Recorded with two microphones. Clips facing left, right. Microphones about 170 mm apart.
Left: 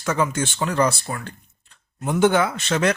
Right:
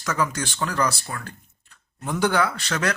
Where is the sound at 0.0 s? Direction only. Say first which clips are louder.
Left 3 dB; 25° left (ahead or behind).